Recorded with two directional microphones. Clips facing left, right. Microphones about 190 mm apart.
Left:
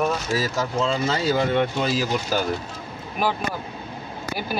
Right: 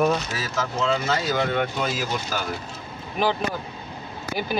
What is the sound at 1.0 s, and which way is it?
Speech, 30° left (ahead or behind).